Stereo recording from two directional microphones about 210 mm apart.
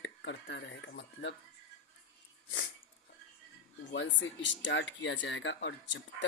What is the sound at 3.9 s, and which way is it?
Speech, 60° left (ahead or behind).